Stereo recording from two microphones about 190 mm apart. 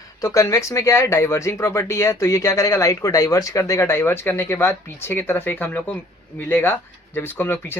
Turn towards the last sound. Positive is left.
turn(degrees=10)  # may be behind; listen again after turning